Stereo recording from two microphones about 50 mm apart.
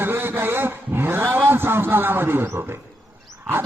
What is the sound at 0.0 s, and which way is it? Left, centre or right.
A man's voice, right.